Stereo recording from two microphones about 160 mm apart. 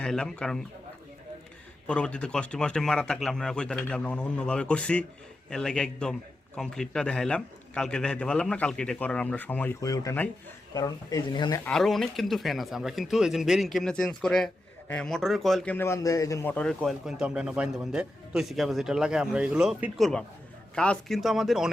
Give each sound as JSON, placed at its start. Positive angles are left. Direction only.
{"t": 0.0, "sound": "speech", "side_deg": 5}
{"t": 1.9, "sound": "speech", "side_deg": 5}
{"t": 9.8, "sound": "speech", "side_deg": 20}
{"t": 11.6, "sound": "speech", "side_deg": 0}